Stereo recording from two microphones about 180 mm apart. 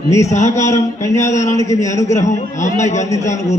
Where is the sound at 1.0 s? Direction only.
15° left (ahead or behind).